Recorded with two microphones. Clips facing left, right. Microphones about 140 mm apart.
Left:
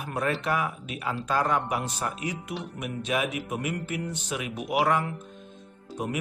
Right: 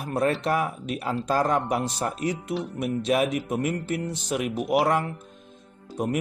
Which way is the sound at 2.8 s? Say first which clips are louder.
Right 6 dB; 40° right (ahead or behind).